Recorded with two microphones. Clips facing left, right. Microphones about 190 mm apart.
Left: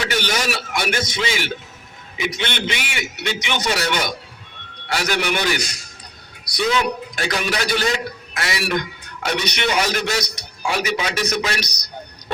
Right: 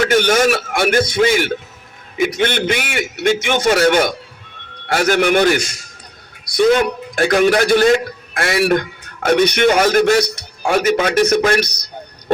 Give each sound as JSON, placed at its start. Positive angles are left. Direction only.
{"t": 0.0, "sound": "a man's voice", "side_deg": -50}